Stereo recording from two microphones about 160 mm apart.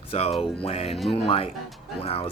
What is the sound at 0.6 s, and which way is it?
Speech, 40° left (ahead or behind).